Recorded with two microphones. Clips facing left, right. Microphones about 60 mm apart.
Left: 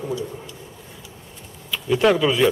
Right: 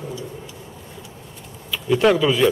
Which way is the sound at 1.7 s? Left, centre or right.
Centre.